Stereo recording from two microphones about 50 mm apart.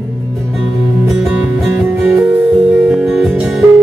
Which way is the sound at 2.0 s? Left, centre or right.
Right.